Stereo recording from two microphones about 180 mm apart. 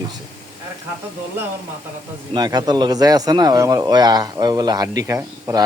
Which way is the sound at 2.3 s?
20° right (ahead or behind).